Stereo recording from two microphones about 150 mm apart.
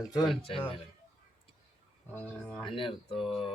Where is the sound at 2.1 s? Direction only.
10° left (ahead or behind).